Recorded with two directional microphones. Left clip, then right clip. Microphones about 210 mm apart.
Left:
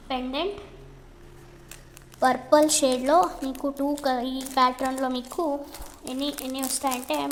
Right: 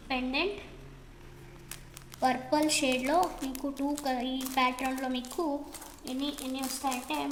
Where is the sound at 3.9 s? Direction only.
Centre (ahead or behind).